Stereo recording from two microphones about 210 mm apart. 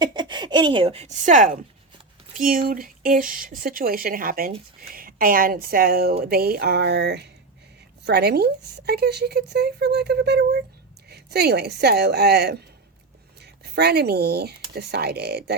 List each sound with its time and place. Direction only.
0.0 s speech: 20° right (ahead or behind); by 15.5 s 50° right (ahead or behind)